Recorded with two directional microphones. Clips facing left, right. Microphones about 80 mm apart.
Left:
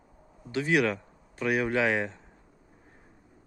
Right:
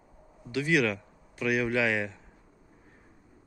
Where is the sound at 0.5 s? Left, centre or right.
Left.